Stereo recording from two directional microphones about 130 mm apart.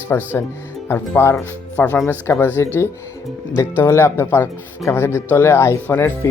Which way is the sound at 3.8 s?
20° left (ahead or behind).